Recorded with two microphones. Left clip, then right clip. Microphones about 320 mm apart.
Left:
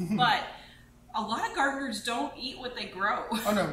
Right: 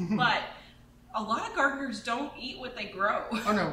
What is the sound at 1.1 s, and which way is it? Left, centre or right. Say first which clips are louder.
A woman's voice: even; centre.